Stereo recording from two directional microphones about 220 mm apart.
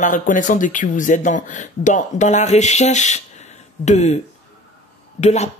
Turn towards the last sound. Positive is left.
turn(degrees=30)  # may be behind; listen again after turning